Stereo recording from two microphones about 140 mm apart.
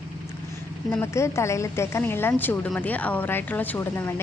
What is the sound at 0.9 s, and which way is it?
A woman's voice, 20° left (ahead or behind).